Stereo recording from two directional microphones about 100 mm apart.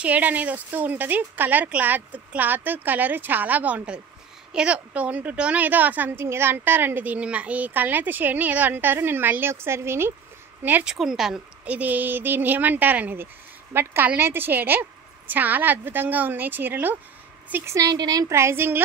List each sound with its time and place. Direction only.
0.0 s a woman's voice: 15° right (ahead or behind)
10.9 s a woman's voice: 5° right (ahead or behind); by 17.7 s 20° right (ahead or behind)
17.7 s a woman's voice: 40° right (ahead or behind)
18.3 s a woman's voice: 25° right (ahead or behind)